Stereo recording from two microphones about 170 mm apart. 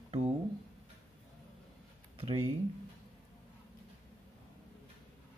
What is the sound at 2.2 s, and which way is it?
Speech, 35° right (ahead or behind).